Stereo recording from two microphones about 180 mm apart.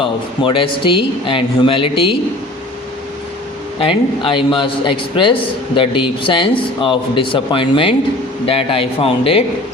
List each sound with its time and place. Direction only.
0.0 s a man's voice: 30° left (ahead or behind)
3.8 s a man's voice: 30° left (ahead or behind)